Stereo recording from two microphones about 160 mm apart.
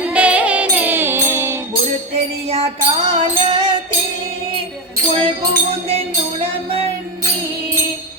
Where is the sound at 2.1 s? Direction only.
40° right (ahead or behind).